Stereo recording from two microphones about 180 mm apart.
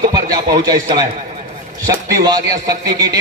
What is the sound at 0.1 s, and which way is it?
A man's voice, 20° right (ahead or behind).